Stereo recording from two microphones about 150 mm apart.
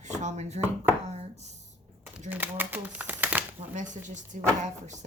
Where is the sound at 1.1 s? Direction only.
45° right (ahead or behind).